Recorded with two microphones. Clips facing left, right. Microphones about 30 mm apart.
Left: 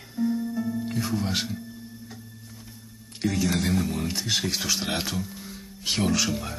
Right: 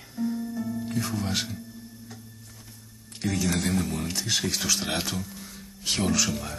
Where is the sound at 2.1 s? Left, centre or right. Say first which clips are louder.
Left 2 dB; centre.